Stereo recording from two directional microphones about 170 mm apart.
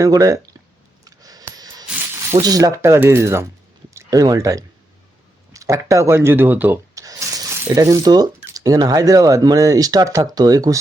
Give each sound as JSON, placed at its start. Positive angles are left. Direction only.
{"t": 0.0, "sound": "speech", "side_deg": -20}
{"t": 1.0, "sound": "a sound", "side_deg": -20}
{"t": 2.4, "sound": "speech", "side_deg": -20}